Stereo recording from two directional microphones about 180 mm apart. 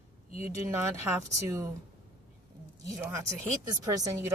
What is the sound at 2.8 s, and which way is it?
A woman's voice, 15° right (ahead or behind).